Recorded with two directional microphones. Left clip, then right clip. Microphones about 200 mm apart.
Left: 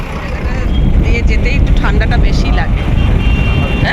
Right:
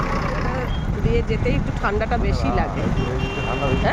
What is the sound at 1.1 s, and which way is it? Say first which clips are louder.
Speech: left 3 dB; 15° right (ahead or behind).